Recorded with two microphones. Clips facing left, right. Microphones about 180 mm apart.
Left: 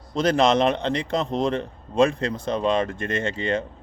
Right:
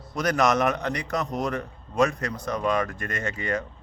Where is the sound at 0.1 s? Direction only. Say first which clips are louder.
Left 4 dB; 25° left (ahead or behind).